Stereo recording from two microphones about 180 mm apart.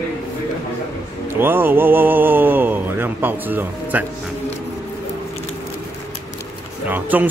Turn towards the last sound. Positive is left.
turn(degrees=-10)  # may be behind; listen again after turning